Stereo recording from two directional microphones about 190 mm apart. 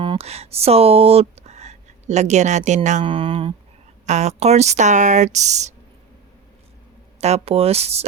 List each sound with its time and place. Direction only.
0.0 s speech: 30° right (ahead or behind)
7.2 s speech: 35° right (ahead or behind)